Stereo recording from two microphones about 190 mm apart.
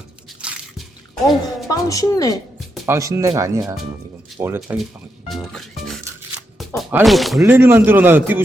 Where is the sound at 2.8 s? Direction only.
15° right (ahead or behind).